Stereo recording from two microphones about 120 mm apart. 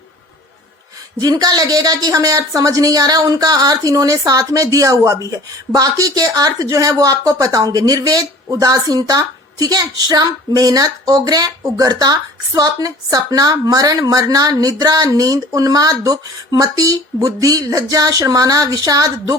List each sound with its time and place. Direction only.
1.2 s speech: 35° right (ahead or behind)